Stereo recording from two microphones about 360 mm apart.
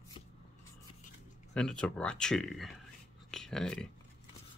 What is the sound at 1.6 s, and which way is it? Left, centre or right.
Speech, centre.